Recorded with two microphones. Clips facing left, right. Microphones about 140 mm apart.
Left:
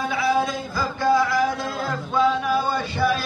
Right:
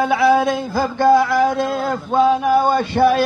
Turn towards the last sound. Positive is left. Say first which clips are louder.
# right 8 dB
turn(degrees=-65)  # may be behind; listen again after turning